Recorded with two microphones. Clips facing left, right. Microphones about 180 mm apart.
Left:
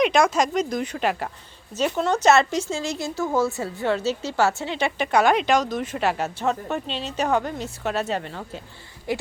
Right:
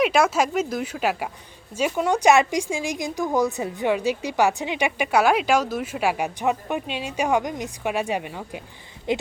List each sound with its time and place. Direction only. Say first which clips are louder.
0.0 s a woman's voice: even; 5° right (ahead or behind); by 9.2 s 20° right (ahead or behind)